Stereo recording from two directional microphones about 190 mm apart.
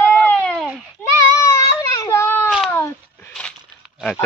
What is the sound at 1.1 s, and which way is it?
Child singing, 15° left (ahead or behind).